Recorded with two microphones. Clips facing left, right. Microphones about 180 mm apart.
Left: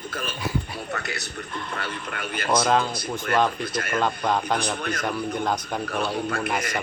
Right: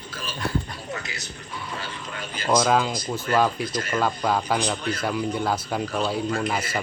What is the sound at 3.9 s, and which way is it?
Speech, 5° right (ahead or behind).